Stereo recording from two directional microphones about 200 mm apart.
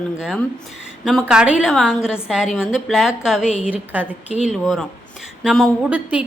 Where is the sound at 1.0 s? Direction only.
5° right (ahead or behind).